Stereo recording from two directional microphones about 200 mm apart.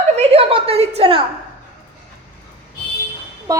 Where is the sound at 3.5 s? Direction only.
15° right (ahead or behind).